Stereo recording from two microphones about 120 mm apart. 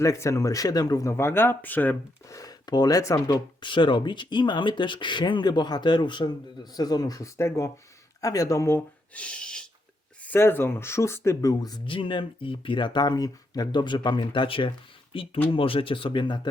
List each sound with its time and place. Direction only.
0.0 s speech: 25° left (ahead or behind)
2.3 s speech: 30° left (ahead or behind)
9.1 s a sound: 10° left (ahead or behind)
10.2 s speech: 20° left (ahead or behind)
11.9 s speech: 45° left (ahead or behind)